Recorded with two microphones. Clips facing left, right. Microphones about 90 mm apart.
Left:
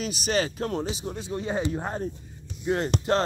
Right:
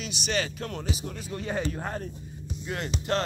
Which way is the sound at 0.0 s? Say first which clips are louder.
Left 4 dB; 40° left (ahead or behind).